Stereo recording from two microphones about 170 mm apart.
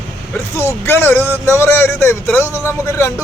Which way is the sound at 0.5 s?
15° left (ahead or behind).